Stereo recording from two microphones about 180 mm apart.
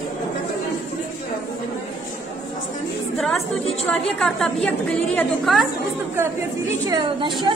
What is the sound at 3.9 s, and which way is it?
A woman's voice, 5° left (ahead or behind).